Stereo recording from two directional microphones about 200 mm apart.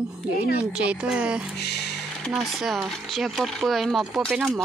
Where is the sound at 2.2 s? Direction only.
Centre (ahead or behind).